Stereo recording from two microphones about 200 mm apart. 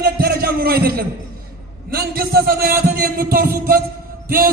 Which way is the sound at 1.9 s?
50° right (ahead or behind).